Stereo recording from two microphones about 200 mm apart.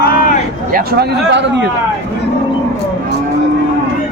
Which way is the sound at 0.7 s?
50° right (ahead or behind).